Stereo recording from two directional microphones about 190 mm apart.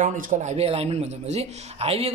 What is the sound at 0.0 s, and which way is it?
Speech, 40° right (ahead or behind).